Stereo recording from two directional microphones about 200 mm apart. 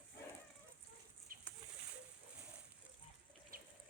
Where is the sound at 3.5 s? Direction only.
45° right (ahead or behind).